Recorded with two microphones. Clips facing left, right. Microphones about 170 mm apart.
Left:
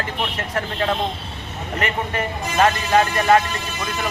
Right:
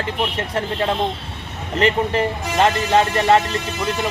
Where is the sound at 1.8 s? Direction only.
30° right (ahead or behind).